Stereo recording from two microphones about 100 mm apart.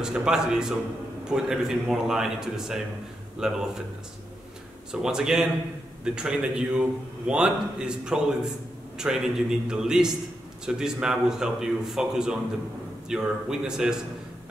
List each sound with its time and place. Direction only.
0.0 s a man's voice: 5° right (ahead or behind)
4.9 s a man's voice: 5° right (ahead or behind)